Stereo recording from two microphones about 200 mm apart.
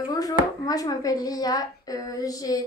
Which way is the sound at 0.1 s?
20° left (ahead or behind).